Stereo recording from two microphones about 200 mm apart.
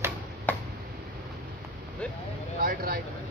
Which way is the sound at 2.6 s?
45° right (ahead or behind).